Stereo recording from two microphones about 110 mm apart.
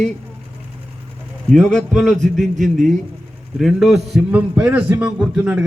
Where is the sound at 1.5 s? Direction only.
5° left (ahead or behind).